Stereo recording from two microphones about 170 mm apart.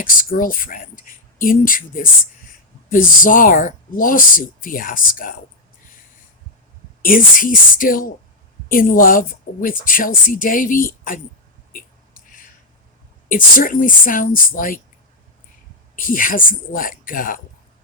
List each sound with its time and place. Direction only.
0.0 s speech: 55° left (ahead or behind)
7.0 s speech: 55° left (ahead or behind)
11.7 s a sound: 55° left (ahead or behind)
13.2 s speech: 55° left (ahead or behind)
16.0 s speech: 55° left (ahead or behind)